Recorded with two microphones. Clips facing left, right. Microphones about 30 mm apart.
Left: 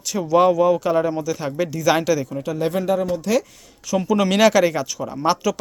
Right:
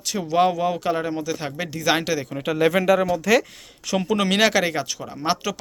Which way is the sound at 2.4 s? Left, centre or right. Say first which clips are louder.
Right 6 dB; right.